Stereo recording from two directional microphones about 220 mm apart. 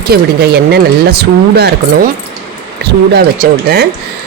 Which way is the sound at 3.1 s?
45° right (ahead or behind).